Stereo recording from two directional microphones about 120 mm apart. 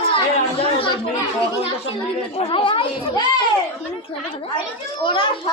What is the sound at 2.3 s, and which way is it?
Speech, 50° left (ahead or behind).